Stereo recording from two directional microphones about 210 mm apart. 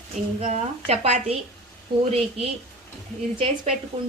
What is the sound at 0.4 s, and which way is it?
Speech, 35° right (ahead or behind).